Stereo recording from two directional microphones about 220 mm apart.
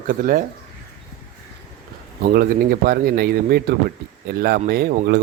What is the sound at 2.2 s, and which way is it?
Speech, 45° right (ahead or behind).